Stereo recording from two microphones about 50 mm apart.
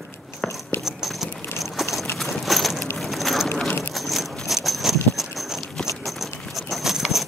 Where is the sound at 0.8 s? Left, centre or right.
Centre.